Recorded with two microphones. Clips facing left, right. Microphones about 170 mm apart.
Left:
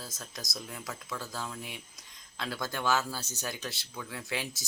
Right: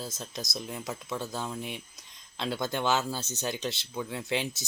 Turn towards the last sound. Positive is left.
turn(degrees=-25)  # may be behind; listen again after turning